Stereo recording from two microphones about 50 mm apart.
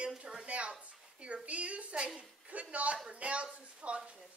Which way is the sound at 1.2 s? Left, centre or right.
Right.